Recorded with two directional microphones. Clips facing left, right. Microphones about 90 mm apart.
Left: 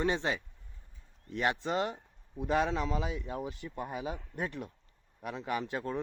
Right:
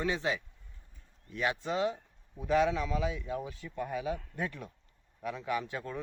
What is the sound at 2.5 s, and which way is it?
Speech, 40° left (ahead or behind).